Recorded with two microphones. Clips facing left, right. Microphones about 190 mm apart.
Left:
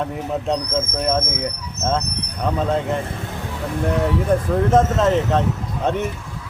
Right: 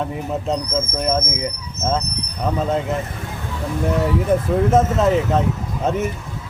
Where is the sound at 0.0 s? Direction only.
Centre (ahead or behind).